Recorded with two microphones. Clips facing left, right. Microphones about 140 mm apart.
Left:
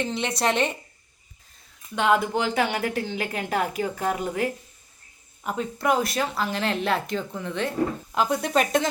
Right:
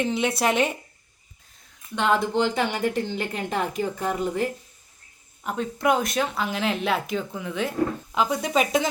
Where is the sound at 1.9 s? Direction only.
5° left (ahead or behind).